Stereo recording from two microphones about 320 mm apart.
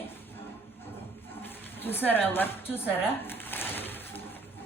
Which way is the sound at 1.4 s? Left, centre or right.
Centre.